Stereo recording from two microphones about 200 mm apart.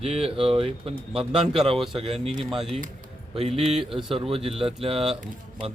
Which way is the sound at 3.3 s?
30° right (ahead or behind).